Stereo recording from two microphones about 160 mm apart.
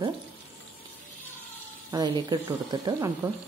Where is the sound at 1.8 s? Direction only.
25° right (ahead or behind).